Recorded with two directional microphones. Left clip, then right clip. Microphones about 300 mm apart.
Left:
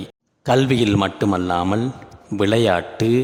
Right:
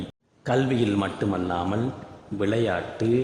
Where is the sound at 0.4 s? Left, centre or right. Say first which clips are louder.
Left 7 dB; left.